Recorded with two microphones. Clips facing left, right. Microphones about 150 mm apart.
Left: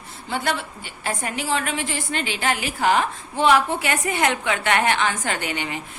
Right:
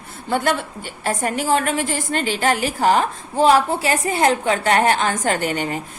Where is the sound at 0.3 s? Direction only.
50° right (ahead or behind).